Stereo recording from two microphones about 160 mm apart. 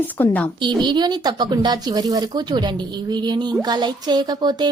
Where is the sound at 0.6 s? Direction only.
30° right (ahead or behind).